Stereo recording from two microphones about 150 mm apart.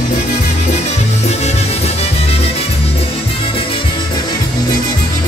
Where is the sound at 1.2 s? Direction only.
45° left (ahead or behind).